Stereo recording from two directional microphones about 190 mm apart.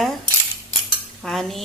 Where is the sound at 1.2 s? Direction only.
Centre (ahead or behind).